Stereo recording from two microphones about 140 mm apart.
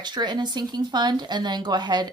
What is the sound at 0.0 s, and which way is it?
Speech, 30° right (ahead or behind).